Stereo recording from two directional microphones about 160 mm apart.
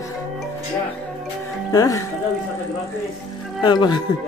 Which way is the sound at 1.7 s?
20° left (ahead or behind).